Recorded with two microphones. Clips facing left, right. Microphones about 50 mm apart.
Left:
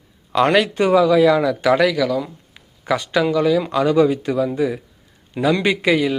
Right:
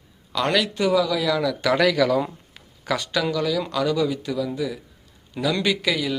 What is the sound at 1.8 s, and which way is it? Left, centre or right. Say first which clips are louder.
Speech: left 1 dB; centre.